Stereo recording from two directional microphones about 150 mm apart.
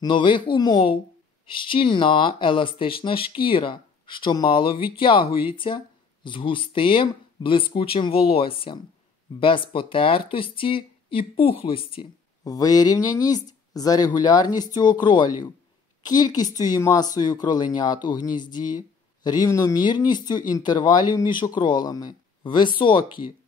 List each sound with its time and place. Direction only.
0.0 s speech: 30° left (ahead or behind)
12.4 s a woman's voice: 25° left (ahead or behind)